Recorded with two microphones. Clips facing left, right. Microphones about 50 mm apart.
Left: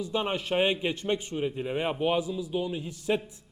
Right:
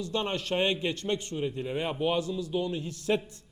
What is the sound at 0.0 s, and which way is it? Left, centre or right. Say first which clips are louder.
A man's voice: left 1 dB; centre.